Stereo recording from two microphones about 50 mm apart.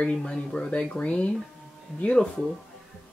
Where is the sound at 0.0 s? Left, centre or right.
Centre.